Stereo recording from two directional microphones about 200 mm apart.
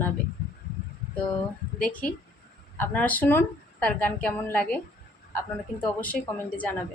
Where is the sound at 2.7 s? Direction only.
10° left (ahead or behind).